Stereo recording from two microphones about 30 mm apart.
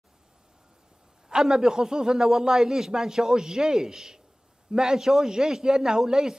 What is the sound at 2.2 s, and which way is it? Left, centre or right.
A man's voice, centre.